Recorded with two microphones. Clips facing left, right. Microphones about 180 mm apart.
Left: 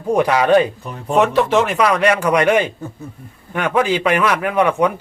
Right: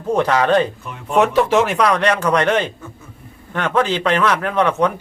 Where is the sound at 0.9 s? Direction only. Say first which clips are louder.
Left 3 dB; 35° left (ahead or behind).